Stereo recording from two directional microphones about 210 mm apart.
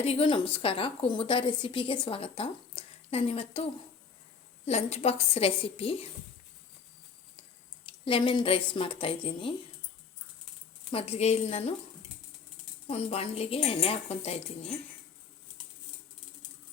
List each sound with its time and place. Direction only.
0.0 s a woman's voice: 30° left (ahead or behind)
7.9 s a woman's voice: 25° left (ahead or behind)
10.9 s a woman's voice: 30° left (ahead or behind)
12.9 s a woman's voice: 30° left (ahead or behind)